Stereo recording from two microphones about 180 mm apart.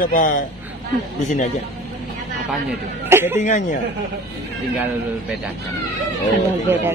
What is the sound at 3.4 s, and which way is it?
Speech, 45° left (ahead or behind).